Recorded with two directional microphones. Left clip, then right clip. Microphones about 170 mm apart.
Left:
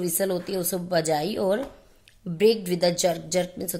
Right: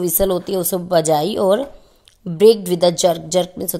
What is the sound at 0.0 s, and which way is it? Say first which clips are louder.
A woman's voice: right 8 dB; 35° right (ahead or behind).